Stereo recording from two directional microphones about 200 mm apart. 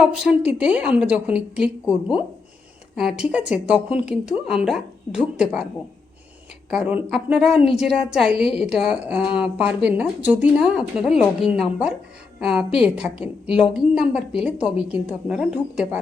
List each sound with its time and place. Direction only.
0.0 s a woman's voice: 5° right (ahead or behind)
6.7 s a woman's voice: 5° right (ahead or behind)